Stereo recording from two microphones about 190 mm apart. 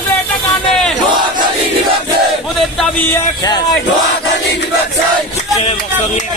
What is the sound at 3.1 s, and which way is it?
Speech, 20° left (ahead or behind).